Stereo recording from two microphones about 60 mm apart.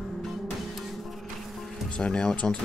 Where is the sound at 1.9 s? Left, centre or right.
Centre.